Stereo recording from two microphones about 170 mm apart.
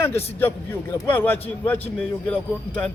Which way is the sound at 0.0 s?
15° left (ahead or behind).